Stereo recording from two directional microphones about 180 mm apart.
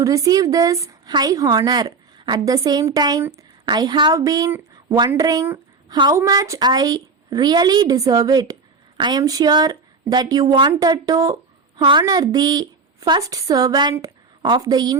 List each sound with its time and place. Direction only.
0.0 s a woman's voice: 20° right (ahead or behind)